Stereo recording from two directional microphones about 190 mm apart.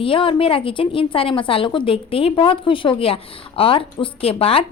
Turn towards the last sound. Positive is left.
turn(degrees=30)  # may be behind; listen again after turning